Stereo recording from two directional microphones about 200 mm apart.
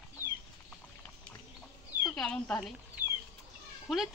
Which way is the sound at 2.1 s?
5° left (ahead or behind).